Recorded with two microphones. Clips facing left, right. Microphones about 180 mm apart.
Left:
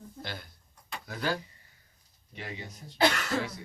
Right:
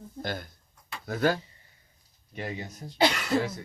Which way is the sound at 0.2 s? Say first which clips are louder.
Right 8 dB; 45° right (ahead or behind).